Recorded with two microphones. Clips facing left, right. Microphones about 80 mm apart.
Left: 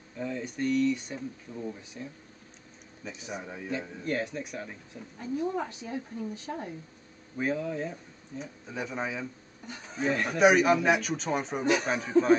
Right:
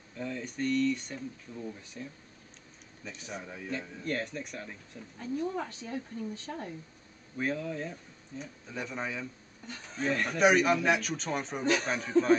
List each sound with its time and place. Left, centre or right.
0.2 s speech: centre